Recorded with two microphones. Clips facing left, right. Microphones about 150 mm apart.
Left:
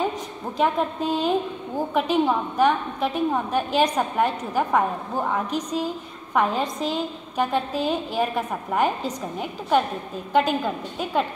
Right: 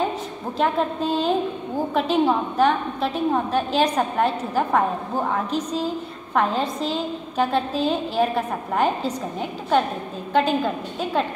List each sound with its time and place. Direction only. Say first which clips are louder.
0.6 s a woman's voice: right 1 dB; 10° left (ahead or behind)